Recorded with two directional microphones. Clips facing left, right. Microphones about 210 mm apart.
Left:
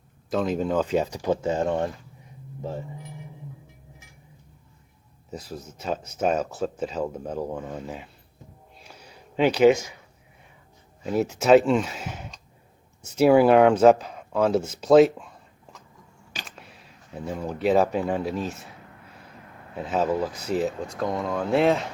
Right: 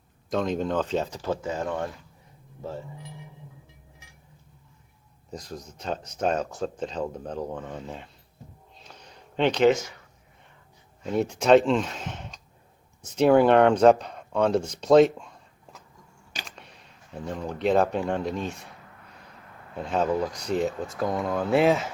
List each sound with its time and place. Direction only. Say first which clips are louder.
0.3 s speech: left 2 dB; 5° left (ahead or behind)
1.4 s speech: left 5 dB; 30° left (ahead or behind)
2.6 s speech: left 2 dB; 15° left (ahead or behind)
5.3 s speech: left 2 dB; 5° left (ahead or behind)
8.8 s a sound: left 1 dB; 10° left (ahead or behind)
11.0 s speech: left 1 dB; 5° left (ahead or behind)
19.7 s speech: left 1 dB; 5° left (ahead or behind)